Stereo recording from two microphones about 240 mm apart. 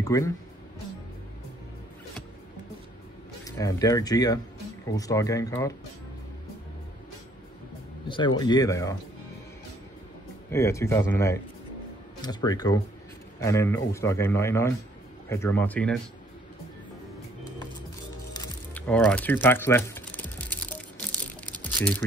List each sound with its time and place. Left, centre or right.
0.0 s speech: centre
3.4 s a man's voice: centre
8.4 s a man's voice: centre
10.5 s a man's voice: centre
18.3 s crumpling: centre